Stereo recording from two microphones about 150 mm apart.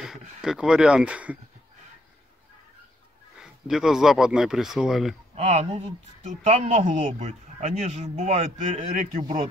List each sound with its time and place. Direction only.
0.4 s speech: 5° right (ahead or behind)
3.3 s speech: 5° right (ahead or behind)
5.3 s a man's voice: 45° right (ahead or behind)